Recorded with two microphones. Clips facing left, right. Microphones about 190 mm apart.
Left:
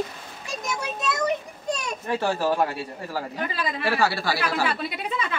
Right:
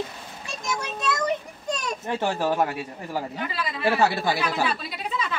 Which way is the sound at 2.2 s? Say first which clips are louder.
Left 1 dB; 15° right (ahead or behind).